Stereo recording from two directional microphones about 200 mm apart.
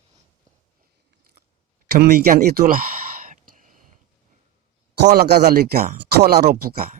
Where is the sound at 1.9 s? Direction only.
50° right (ahead or behind).